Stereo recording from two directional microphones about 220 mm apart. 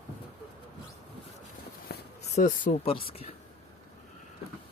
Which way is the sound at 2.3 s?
35° left (ahead or behind).